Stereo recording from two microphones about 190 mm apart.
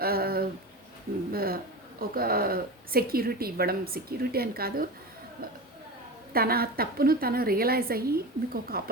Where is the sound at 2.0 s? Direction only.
50° right (ahead or behind).